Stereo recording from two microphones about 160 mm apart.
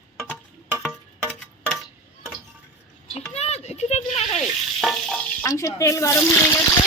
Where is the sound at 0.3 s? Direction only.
10° right (ahead or behind).